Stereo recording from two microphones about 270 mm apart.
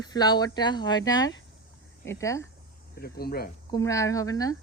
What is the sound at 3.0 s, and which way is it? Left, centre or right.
Speech, left.